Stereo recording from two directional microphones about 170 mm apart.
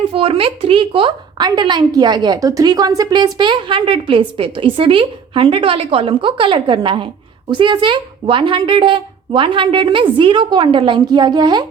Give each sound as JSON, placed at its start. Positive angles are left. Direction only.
{"t": 0.1, "sound": "speech", "side_deg": -35}